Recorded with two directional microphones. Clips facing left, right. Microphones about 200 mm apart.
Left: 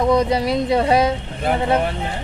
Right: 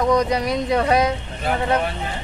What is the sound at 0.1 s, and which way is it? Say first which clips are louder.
Speech: left 2 dB; 30° left (ahead or behind).